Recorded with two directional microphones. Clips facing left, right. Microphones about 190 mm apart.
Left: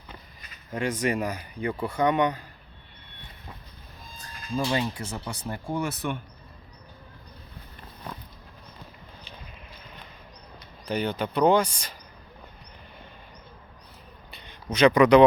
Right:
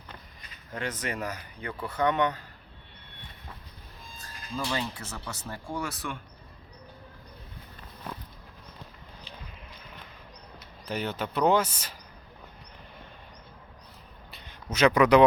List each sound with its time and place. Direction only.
0.7 s speech: 10° left (ahead or behind)
4.5 s speech: 15° left (ahead or behind)
10.8 s speech: centre (ahead or behind)
14.3 s a sound: centre (ahead or behind)